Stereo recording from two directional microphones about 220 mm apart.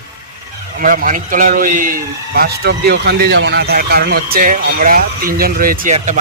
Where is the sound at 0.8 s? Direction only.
40° right (ahead or behind).